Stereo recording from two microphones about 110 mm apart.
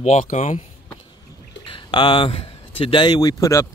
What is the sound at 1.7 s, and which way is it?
Speech, 50° left (ahead or behind).